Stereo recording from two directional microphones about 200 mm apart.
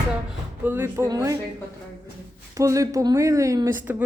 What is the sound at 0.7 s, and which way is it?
Speech, 10° right (ahead or behind).